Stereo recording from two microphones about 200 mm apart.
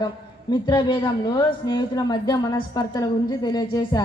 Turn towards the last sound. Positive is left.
turn(degrees=20)  # may be behind; listen again after turning